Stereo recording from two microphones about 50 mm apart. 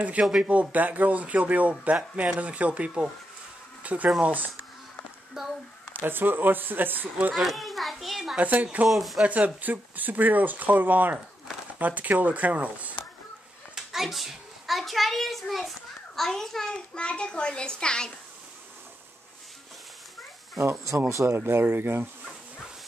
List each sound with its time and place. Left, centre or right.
0.0 s a man's voice: right
5.4 s a sound: centre
5.9 s speech: right
7.3 s a child's voice: centre
8.4 s speech: right
8.8 s speech: centre
9.2 s speech: right
13.7 s hands: centre
16.2 s a child's voice: centre
16.9 s a child's voice: left
20.5 s speech: right